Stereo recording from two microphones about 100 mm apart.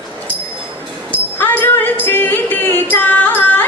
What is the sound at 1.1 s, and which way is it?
Music, 20° left (ahead or behind).